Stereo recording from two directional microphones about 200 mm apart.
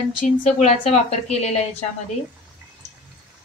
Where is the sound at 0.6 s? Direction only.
35° left (ahead or behind).